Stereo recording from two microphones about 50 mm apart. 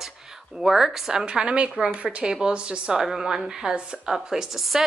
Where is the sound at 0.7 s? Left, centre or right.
Centre.